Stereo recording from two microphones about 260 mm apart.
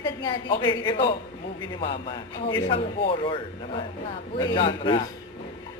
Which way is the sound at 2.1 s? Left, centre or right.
Centre.